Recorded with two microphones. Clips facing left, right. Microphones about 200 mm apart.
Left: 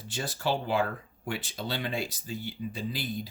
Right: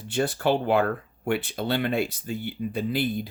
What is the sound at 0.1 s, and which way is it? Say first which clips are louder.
Speech: right 7 dB; 60° right (ahead or behind).